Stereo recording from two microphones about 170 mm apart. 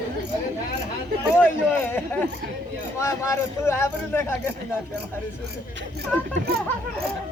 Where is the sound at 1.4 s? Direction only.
15° left (ahead or behind).